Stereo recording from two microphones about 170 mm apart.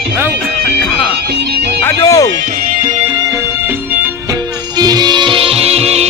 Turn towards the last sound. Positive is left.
turn(degrees=-40)  # may be behind; listen again after turning